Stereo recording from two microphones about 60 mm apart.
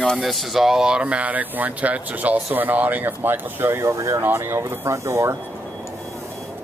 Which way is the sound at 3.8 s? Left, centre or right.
Right.